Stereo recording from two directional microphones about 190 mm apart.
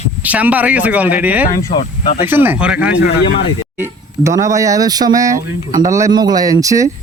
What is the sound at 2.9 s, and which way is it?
Speech, 60° left (ahead or behind).